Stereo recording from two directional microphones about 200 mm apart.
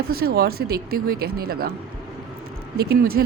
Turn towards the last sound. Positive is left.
turn(degrees=-50)  # may be behind; listen again after turning